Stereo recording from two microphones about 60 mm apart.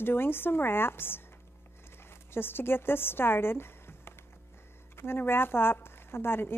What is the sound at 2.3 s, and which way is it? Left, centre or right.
A woman's voice, left.